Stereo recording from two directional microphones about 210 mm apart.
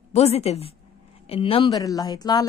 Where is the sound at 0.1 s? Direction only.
30° left (ahead or behind).